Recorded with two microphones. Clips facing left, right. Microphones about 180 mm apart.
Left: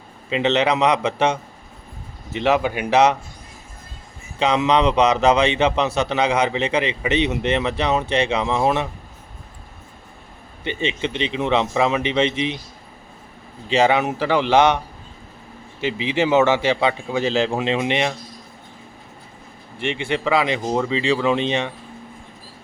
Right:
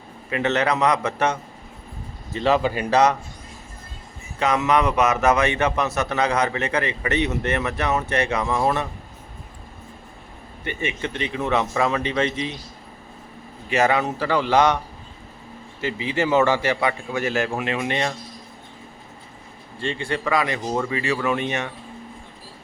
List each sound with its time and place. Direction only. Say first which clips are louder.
0.3 s a man's voice: left 3 dB; 20° left (ahead or behind)
2.5 s speech: left 1 dB; centre (ahead or behind)
2.9 s speech: left 2 dB; 25° left (ahead or behind)
4.4 s a man's voice: left 2 dB; 15° left (ahead or behind)
5.4 s speech: left 3 dB; 25° left (ahead or behind)
6.1 s a man's voice: left 2 dB; 10° left (ahead or behind)
10.6 s speech: left 3 dB; 25° left (ahead or behind)
13.7 s speech: left 3 dB; 25° left (ahead or behind)
15.9 s speech: left 3 dB; 20° left (ahead or behind)
19.9 s speech: left 3 dB; 20° left (ahead or behind)